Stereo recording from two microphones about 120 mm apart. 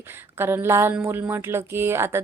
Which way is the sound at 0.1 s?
20° right (ahead or behind).